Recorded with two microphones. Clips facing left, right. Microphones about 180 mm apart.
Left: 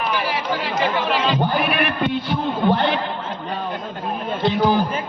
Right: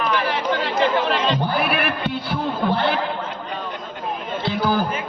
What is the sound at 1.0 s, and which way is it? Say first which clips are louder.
Speech: left 1 dB; 5° left (ahead or behind).